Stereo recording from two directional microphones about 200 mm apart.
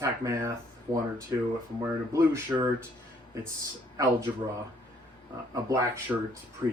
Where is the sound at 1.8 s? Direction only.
15° right (ahead or behind).